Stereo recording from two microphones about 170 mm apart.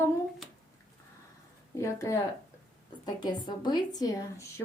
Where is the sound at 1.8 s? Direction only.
20° left (ahead or behind).